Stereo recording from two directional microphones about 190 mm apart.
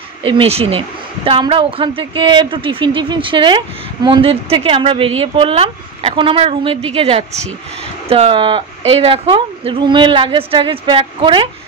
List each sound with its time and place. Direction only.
0.2 s a woman's voice: 30° right (ahead or behind)